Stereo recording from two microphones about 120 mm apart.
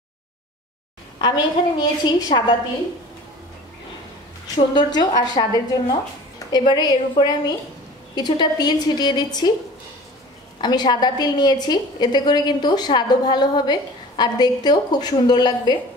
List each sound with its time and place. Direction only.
1.2 s a woman's voice: 40° left (ahead or behind)
4.7 s a woman's voice: 35° left (ahead or behind)
10.6 s a woman's voice: 35° left (ahead or behind)